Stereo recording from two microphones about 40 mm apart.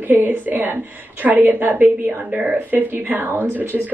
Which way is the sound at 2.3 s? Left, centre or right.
Right.